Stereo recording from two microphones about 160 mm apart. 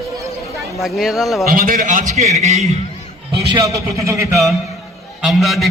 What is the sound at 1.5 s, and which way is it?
A man's voice, 60° right (ahead or behind).